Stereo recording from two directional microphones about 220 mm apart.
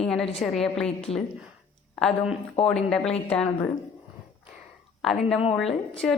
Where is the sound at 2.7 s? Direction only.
Centre (ahead or behind).